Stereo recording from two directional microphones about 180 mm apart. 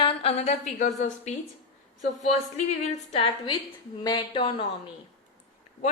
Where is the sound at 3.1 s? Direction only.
30° left (ahead or behind).